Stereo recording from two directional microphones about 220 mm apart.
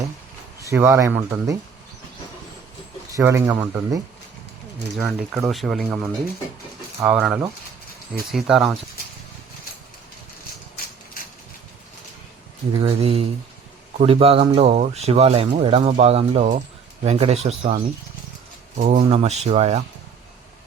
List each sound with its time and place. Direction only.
0.7 s speech: 10° right (ahead or behind)
3.2 s speech: 10° right (ahead or behind)
5.0 s speech: centre (ahead or behind)
12.8 s speech: 25° right (ahead or behind)